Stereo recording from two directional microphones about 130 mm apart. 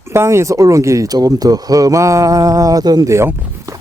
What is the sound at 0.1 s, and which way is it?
Speech, 20° right (ahead or behind).